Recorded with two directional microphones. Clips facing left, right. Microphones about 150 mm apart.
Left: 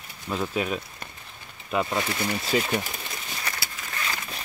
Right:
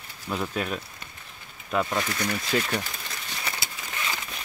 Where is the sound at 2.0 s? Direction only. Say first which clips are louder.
Left 1 dB; 25° left (ahead or behind).